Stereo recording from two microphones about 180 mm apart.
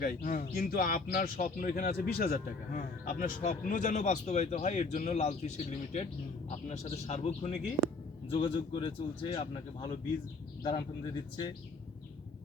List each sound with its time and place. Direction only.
0.0 s a man's voice: 50° left (ahead or behind); by 10.8 s 25° left (ahead or behind)